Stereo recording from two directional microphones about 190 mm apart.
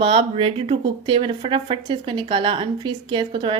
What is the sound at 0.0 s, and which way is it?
Speech, 25° right (ahead or behind).